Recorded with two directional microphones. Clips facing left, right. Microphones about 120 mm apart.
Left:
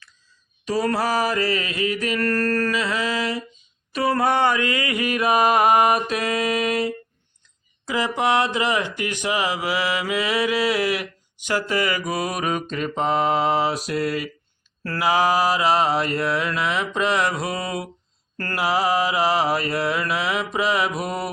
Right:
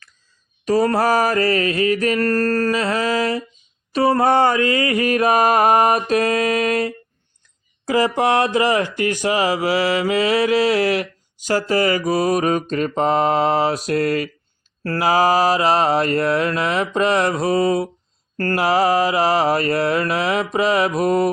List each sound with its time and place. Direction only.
0.6 s mantra: 45° right (ahead or behind)
3.9 s mantra: 35° right (ahead or behind); by 14.3 s 50° right (ahead or behind)
14.8 s mantra: 40° right (ahead or behind)